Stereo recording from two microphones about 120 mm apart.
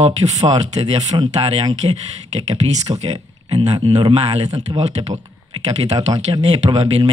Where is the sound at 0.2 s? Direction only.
35° right (ahead or behind).